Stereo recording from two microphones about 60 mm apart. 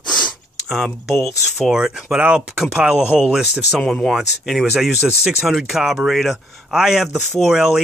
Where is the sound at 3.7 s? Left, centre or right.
Centre.